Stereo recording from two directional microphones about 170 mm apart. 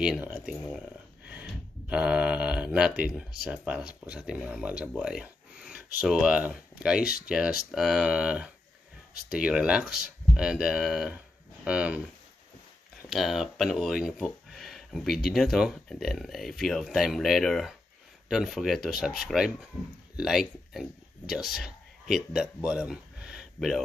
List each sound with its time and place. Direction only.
0.0 s speech: 5° right (ahead or behind)
13.1 s speech: centre (ahead or behind)